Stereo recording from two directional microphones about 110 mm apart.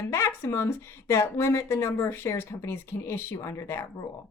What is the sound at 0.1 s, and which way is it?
Speech, 25° left (ahead or behind).